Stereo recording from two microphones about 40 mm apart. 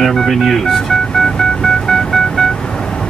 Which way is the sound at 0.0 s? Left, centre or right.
Centre.